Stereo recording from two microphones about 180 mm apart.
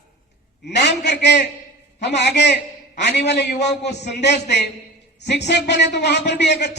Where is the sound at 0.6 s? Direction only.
70° left (ahead or behind).